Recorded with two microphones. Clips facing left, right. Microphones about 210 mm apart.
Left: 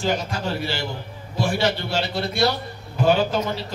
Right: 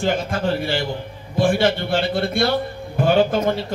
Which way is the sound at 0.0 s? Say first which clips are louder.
Right 4 dB; 50° right (ahead or behind).